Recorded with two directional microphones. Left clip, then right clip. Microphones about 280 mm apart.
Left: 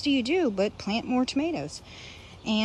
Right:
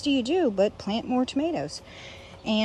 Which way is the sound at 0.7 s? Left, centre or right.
Centre.